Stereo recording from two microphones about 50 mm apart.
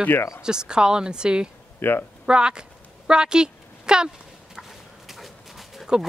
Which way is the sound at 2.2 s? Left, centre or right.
Centre.